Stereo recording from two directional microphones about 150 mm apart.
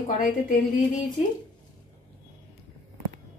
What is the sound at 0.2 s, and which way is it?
Speech, 65° left (ahead or behind).